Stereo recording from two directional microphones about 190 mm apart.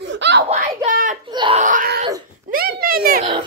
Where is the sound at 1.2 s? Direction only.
25° right (ahead or behind).